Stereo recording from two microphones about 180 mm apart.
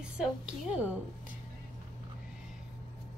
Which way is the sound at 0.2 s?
5° right (ahead or behind).